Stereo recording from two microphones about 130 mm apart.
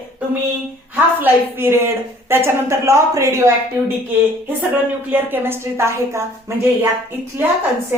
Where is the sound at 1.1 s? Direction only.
15° right (ahead or behind).